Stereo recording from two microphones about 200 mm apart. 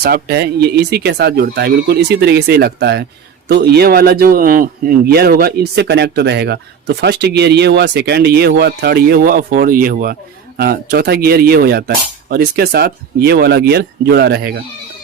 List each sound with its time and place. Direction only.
0.0 s a man's voice: 50° right (ahead or behind)